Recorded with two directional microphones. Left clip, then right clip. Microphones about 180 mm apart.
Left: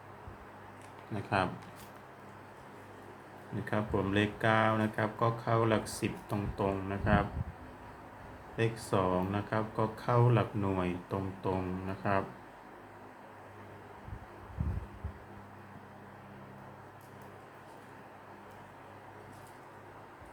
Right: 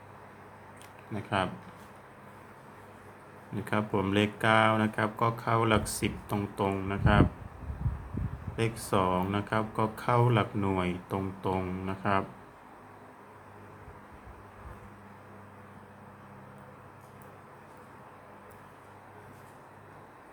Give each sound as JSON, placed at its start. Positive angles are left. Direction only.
{"t": 1.1, "sound": "speech", "side_deg": -10}
{"t": 3.7, "sound": "speech", "side_deg": -25}
{"t": 8.5, "sound": "speech", "side_deg": -25}